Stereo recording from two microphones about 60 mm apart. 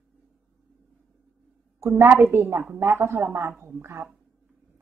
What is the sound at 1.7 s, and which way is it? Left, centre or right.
A woman's voice, right.